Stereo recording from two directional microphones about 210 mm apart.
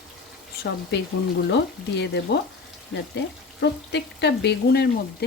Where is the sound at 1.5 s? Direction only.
55° left (ahead or behind).